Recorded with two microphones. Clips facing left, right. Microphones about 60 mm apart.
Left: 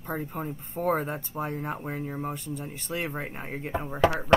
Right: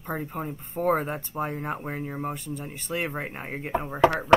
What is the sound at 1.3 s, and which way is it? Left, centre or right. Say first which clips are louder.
Speech: right 2 dB; right.